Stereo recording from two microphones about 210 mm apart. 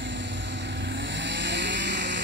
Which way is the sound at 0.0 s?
60° right (ahead or behind).